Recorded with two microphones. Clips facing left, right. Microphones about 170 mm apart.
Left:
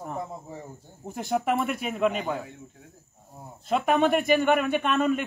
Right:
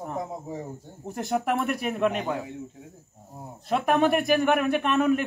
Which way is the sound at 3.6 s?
Centre (ahead or behind).